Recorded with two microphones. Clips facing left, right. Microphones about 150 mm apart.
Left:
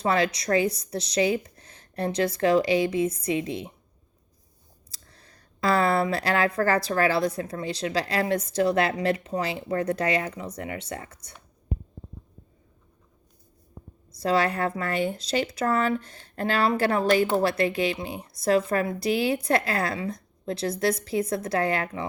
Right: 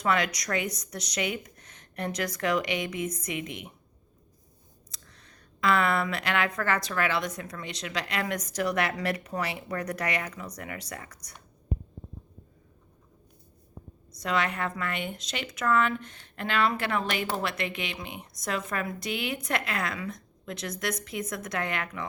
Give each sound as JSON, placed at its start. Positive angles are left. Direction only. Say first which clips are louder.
{"t": 0.0, "sound": "speech", "louder": "left 3 dB", "side_deg": 30}
{"t": 4.9, "sound": "speech", "louder": "left 1 dB", "side_deg": 35}
{"t": 14.1, "sound": "speech", "louder": "left 5 dB", "side_deg": 30}